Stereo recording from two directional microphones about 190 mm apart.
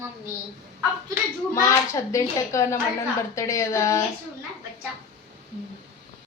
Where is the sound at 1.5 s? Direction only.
15° left (ahead or behind).